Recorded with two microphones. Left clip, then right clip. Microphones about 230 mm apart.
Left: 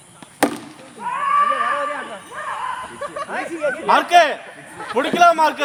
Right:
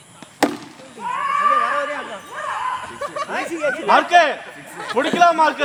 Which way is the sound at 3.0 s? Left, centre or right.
Right.